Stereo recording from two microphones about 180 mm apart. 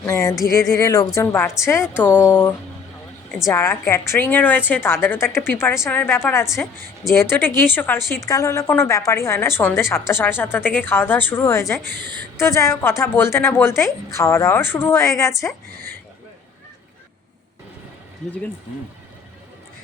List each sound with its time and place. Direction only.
0.0 s a woman's voice: 15° left (ahead or behind)